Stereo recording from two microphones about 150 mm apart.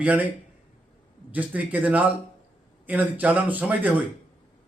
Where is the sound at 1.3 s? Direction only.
10° right (ahead or behind).